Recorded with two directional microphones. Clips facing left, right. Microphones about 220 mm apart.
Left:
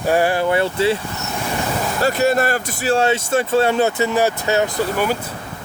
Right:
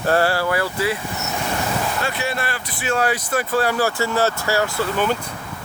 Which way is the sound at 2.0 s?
40° left (ahead or behind).